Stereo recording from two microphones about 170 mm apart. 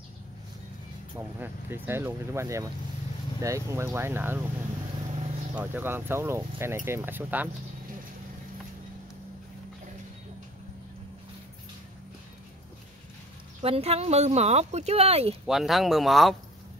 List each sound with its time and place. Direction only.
1.1 s speech: 15° right (ahead or behind)
5.5 s speech: 10° right (ahead or behind)
13.6 s speech: 35° right (ahead or behind)
15.4 s speech: centre (ahead or behind)